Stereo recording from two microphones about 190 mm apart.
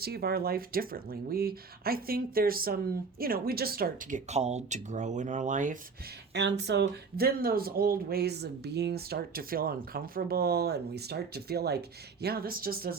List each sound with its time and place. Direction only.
0.0 s speech: 55° right (ahead or behind)
4.3 s speech: 35° right (ahead or behind)
6.3 s speech: 65° right (ahead or behind)